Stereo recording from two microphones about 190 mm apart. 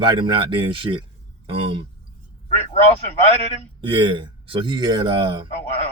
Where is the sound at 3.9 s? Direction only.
25° right (ahead or behind).